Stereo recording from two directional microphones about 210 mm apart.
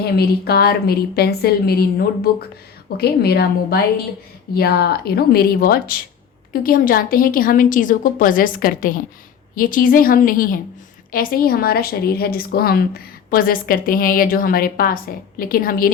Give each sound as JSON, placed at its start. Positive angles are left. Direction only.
{"t": 0.2, "sound": "a woman's voice", "side_deg": 50}